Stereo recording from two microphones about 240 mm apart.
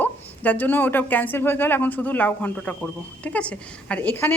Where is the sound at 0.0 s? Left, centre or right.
Centre.